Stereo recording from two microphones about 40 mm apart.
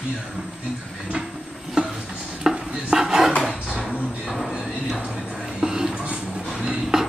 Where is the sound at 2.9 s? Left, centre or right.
Centre.